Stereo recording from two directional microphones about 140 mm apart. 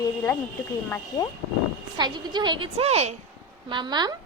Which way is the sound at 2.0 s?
30° right (ahead or behind).